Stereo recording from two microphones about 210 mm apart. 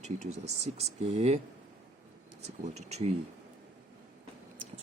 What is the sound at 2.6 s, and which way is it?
Speech, 30° right (ahead or behind).